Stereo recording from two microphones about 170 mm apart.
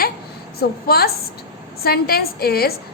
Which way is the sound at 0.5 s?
65° left (ahead or behind).